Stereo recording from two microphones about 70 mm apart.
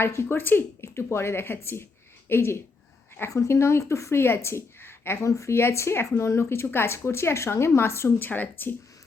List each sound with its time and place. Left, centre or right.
0.0 s speech: left
8.3 s speech: left